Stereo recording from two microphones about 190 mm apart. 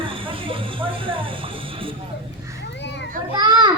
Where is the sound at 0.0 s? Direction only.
25° right (ahead or behind).